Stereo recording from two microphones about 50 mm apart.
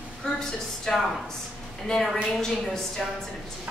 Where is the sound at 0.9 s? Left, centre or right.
Centre.